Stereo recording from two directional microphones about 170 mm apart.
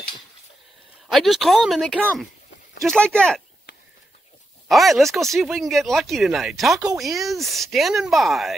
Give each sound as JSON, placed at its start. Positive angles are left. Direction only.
{"t": 1.0, "sound": "speech", "side_deg": 0}
{"t": 3.7, "sound": "a sound", "side_deg": 90}
{"t": 4.6, "sound": "speech", "side_deg": 0}